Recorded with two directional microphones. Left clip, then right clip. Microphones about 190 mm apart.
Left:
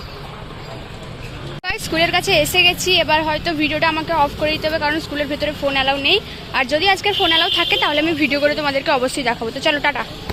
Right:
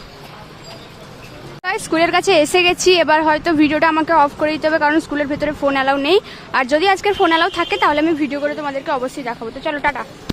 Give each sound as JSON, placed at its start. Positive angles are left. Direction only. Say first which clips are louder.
{"t": 1.6, "sound": "speech", "louder": "right 2 dB", "side_deg": -30}
{"t": 8.3, "sound": "speech", "louder": "left 4 dB", "side_deg": -10}